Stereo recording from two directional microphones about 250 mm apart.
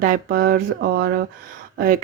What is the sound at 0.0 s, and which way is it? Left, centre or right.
Speech, right.